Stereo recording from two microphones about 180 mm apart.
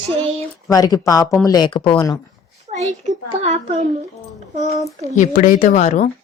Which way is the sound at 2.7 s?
40° right (ahead or behind).